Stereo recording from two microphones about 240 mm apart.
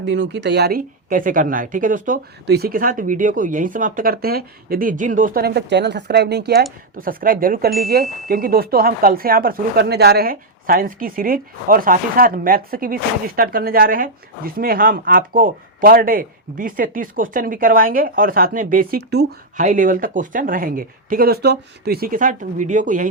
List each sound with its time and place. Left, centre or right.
0.0 s speech: right